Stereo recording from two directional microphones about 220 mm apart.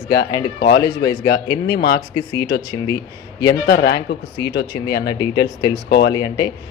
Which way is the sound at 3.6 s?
45° left (ahead or behind).